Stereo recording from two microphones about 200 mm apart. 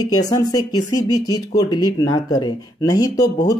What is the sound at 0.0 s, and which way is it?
Speech, 20° left (ahead or behind).